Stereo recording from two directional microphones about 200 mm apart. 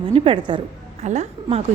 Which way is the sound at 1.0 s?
35° right (ahead or behind).